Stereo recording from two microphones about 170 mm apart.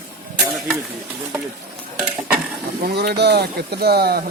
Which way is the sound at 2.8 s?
70° right (ahead or behind).